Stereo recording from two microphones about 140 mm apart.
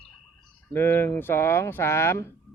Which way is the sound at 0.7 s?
15° left (ahead or behind).